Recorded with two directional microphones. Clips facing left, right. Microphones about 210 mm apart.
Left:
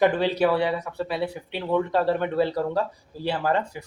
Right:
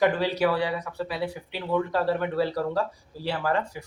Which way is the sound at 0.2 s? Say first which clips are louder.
Left 3 dB; 25° left (ahead or behind).